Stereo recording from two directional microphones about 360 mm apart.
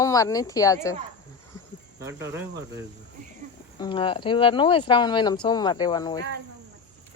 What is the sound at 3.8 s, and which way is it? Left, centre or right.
Speech, centre.